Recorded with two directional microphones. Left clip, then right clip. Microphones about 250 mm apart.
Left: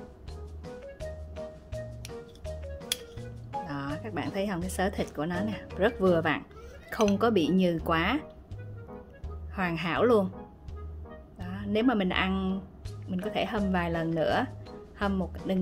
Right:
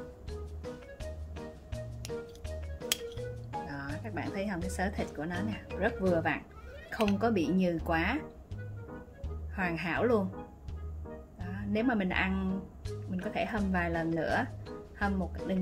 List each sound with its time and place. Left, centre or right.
3.6 s speech: left
9.6 s speech: left
11.3 s a woman's voice: left